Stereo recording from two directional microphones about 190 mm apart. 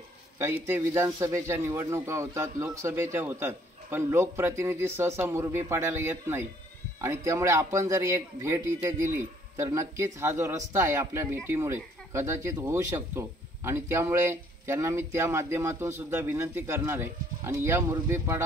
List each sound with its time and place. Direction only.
0.4 s a man's voice: 10° right (ahead or behind)